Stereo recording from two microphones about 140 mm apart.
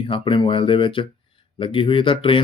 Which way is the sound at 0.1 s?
35° left (ahead or behind).